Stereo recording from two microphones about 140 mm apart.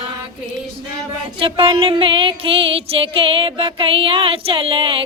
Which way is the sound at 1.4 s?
40° right (ahead or behind).